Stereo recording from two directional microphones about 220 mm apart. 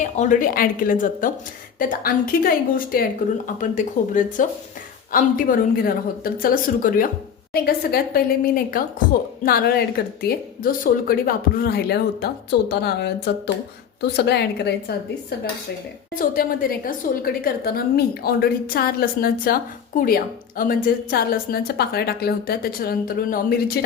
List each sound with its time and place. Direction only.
0.0 s a woman's voice: 35° left (ahead or behind)
14.2 s a woman's voice: 50° left (ahead or behind)
16.1 s a woman's voice: 40° left (ahead or behind)